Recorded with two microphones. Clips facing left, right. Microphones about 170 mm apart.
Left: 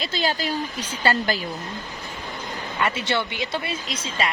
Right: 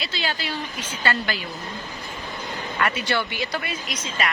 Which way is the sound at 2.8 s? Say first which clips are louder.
Even; 25° left (ahead or behind).